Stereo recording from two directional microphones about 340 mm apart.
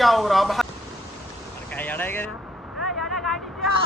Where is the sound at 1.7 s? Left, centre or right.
Centre.